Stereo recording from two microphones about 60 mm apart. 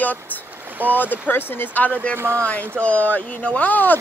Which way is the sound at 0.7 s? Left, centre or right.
Right.